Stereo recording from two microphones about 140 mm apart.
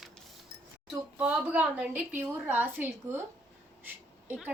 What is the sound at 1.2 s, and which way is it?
A woman's voice, 10° right (ahead or behind).